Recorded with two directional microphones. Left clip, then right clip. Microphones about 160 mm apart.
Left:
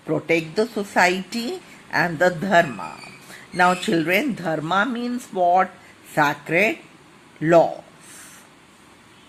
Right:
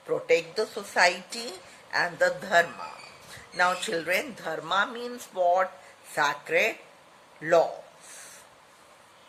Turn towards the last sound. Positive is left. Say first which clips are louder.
# left 7 dB
turn(degrees=45)  # may be behind; listen again after turning